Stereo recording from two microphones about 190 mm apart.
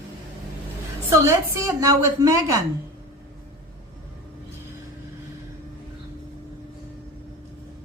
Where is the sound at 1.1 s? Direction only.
15° right (ahead or behind).